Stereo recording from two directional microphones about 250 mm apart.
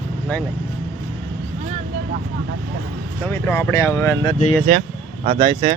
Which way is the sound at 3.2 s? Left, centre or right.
Centre.